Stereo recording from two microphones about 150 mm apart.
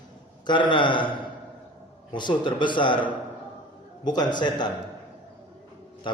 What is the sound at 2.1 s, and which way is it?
A man's voice, 30° left (ahead or behind).